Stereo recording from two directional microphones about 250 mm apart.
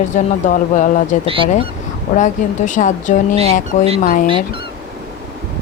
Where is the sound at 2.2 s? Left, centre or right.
Left.